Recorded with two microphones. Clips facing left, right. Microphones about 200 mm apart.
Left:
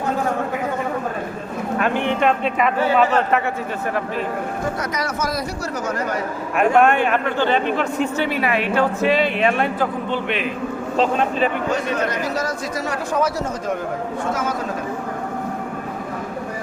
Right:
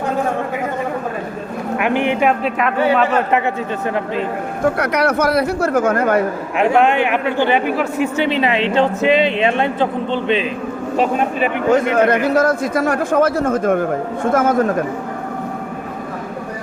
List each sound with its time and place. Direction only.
1.8 s speech: 15° right (ahead or behind)
2.4 s speech: centre (ahead or behind)
4.8 s a man's voice: 65° right (ahead or behind)
6.7 s speech: 15° right (ahead or behind)
10.9 s speech: 10° right (ahead or behind)
11.7 s a man's voice: 55° right (ahead or behind)